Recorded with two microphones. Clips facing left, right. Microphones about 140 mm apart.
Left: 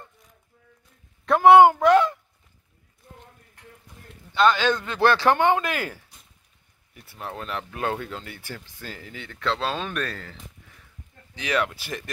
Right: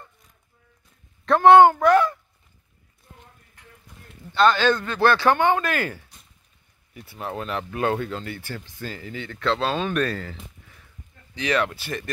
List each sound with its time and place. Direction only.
1.2 s speech: 10° left (ahead or behind)
4.3 s speech: 10° left (ahead or behind)
4.8 s speech: 20° left (ahead or behind)
5.8 s speech: 5° left (ahead or behind)
11.3 s speech: 5° left (ahead or behind)